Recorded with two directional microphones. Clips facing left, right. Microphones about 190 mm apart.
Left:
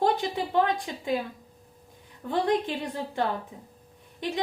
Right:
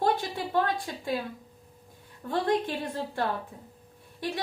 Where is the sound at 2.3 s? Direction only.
15° left (ahead or behind).